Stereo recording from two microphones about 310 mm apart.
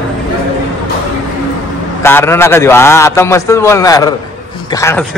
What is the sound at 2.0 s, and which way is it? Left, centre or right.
A man's voice, centre.